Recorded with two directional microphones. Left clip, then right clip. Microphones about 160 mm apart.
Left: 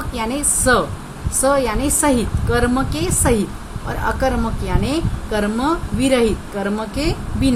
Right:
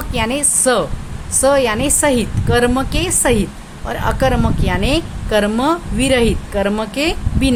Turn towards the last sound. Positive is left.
turn(degrees=-30)  # may be behind; listen again after turning